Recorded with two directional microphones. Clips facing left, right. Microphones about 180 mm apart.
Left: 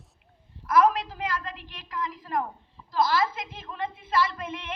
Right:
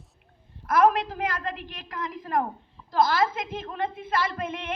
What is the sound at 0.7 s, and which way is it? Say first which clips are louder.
A woman's voice: right 1 dB; 55° right (ahead or behind).